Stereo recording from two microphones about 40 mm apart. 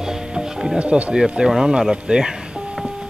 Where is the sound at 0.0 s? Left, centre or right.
Centre.